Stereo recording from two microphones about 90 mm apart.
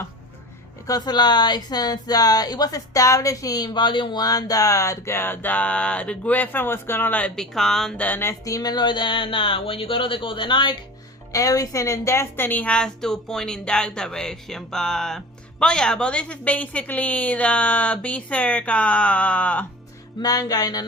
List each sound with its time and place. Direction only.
0.9 s speech: 50° left (ahead or behind); by 7.4 s 15° left (ahead or behind)
7.5 s speech: 5° left (ahead or behind)
8.0 s speech: 25° left (ahead or behind)
8.4 s speech: 45° left (ahead or behind); by 10.8 s 60° left (ahead or behind)
11.3 s a woman's voice: 40° left (ahead or behind); by 19.6 s 15° left (ahead or behind)
20.2 s music: 45° left (ahead or behind)